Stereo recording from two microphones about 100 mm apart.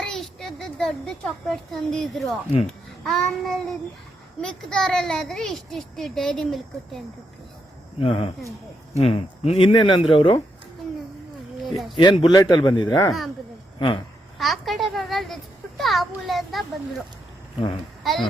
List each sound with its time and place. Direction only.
0.0 s a child's voice: 5° left (ahead or behind)
7.9 s speech: 70° left (ahead or behind)
9.0 s speech: 90° left; by 10.4 s 65° left (ahead or behind)
11.6 s speech: centre (ahead or behind)
12.2 s speech: 40° left (ahead or behind)
13.7 s speech: 50° left (ahead or behind)
14.3 s a woman's voice: centre (ahead or behind)
18.0 s a child's voice: centre (ahead or behind)